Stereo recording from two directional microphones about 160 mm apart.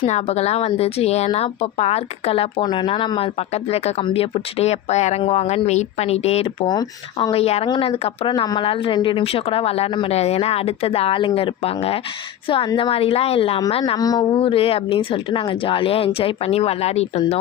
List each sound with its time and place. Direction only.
0.0 s speech: 40° left (ahead or behind)
7.3 s a woman's voice: 40° left (ahead or behind)
14.3 s speech: 35° left (ahead or behind)